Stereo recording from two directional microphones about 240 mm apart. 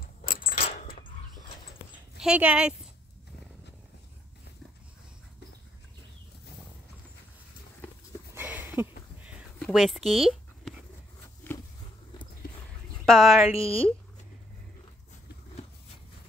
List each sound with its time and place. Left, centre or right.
0.2 s keys jangling: left
2.1 s speech: centre
8.4 s a sound: centre
13.0 s speech: centre
13.6 s speech: left